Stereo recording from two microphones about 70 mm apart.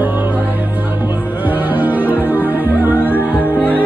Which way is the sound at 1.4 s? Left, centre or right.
Right.